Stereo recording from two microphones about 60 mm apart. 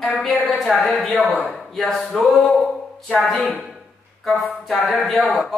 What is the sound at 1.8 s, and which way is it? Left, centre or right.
A man's voice, centre.